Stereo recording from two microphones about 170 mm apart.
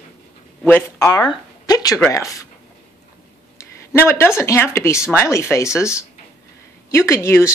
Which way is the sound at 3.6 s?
15° left (ahead or behind).